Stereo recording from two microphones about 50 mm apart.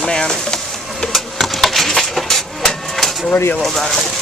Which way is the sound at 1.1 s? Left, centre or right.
Centre.